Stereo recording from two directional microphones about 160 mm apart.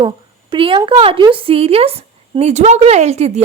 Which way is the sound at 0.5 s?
30° right (ahead or behind).